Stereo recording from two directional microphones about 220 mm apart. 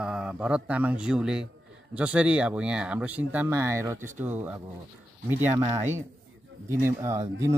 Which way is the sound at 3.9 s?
35° right (ahead or behind).